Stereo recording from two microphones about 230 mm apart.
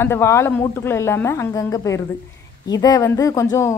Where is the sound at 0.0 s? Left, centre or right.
Centre.